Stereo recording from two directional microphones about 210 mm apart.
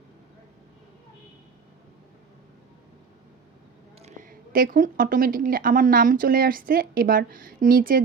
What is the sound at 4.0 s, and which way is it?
A woman's voice, 35° right (ahead or behind).